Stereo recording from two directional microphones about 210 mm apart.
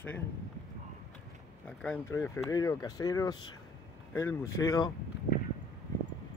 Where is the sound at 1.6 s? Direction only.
5° left (ahead or behind).